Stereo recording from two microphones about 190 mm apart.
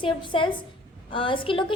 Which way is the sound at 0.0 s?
25° left (ahead or behind).